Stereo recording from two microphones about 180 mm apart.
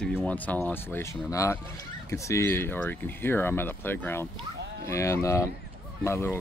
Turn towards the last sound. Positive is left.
turn(degrees=15)  # may be behind; listen again after turning